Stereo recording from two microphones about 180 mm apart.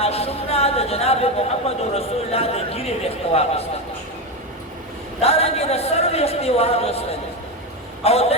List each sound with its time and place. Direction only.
0.0 s a woman's voice: 35° left (ahead or behind)
5.2 s speech: 35° left (ahead or behind)